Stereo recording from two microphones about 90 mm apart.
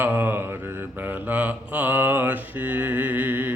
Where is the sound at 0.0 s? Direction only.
25° right (ahead or behind).